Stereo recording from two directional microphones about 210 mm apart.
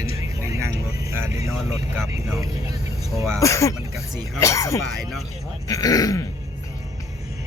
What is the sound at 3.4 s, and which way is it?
A man's voice, 15° left (ahead or behind).